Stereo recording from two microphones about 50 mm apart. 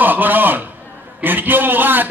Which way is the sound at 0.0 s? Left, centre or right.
Right.